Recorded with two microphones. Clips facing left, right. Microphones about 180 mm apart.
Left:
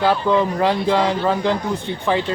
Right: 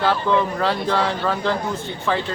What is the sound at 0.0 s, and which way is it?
Speech, 15° left (ahead or behind).